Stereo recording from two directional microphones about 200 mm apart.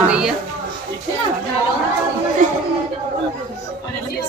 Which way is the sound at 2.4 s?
40° right (ahead or behind).